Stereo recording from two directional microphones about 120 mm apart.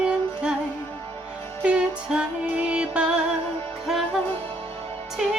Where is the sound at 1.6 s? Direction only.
10° right (ahead or behind).